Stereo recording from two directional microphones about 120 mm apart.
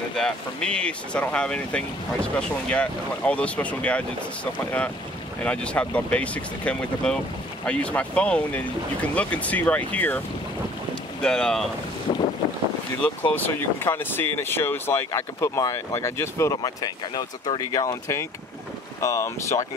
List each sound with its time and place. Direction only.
0.1 s speech: 5° left (ahead or behind)
5.4 s speech: 10° left (ahead or behind)
11.2 s speech: 5° left (ahead or behind)
12.1 s boat: 50° left (ahead or behind)
13.3 s speech: 15° left (ahead or behind)